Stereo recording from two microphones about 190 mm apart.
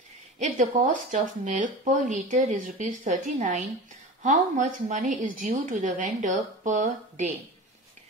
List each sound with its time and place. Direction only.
0.4 s a woman's voice: 40° right (ahead or behind)